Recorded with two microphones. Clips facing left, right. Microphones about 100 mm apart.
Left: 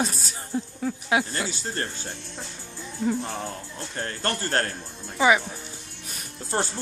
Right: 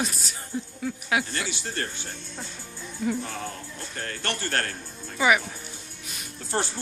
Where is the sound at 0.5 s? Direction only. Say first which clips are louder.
Left 3 dB; 30° left (ahead or behind).